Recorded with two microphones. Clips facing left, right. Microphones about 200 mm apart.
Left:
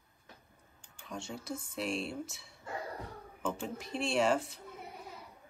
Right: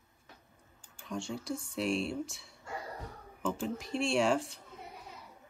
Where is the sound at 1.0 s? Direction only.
Centre (ahead or behind).